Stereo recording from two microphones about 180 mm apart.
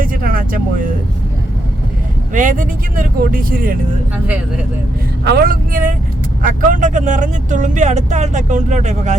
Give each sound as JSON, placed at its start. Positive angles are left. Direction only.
{"t": 0.0, "sound": "vehicle", "side_deg": -50}
{"t": 2.3, "sound": "speech", "side_deg": -45}
{"t": 5.2, "sound": "speech", "side_deg": -65}